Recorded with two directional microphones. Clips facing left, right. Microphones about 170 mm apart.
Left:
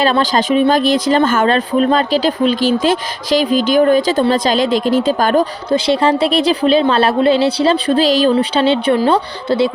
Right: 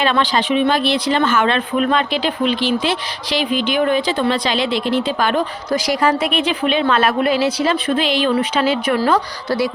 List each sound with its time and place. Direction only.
0.0 s speech: 40° left (ahead or behind)
5.7 s a woman's voice: 30° left (ahead or behind)